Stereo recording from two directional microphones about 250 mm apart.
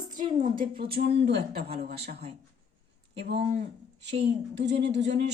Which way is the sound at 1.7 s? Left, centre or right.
Right.